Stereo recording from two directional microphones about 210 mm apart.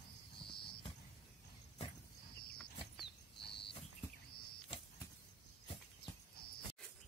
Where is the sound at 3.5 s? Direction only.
25° left (ahead or behind).